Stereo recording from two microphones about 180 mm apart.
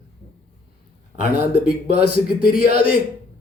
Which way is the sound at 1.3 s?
55° left (ahead or behind).